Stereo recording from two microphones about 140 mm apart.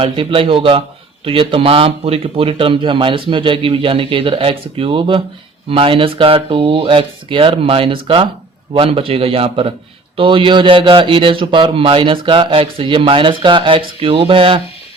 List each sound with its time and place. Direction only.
0.0 s a man's voice: 40° right (ahead or behind)